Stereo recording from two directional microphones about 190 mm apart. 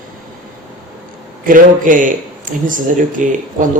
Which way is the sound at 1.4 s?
45° right (ahead or behind).